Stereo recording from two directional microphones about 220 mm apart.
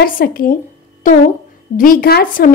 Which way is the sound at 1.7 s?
40° left (ahead or behind).